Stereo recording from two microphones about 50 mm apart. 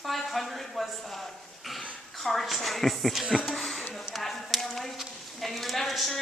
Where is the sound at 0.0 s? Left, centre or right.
Centre.